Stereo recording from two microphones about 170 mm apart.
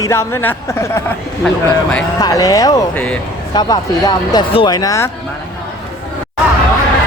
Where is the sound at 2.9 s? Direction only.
10° left (ahead or behind).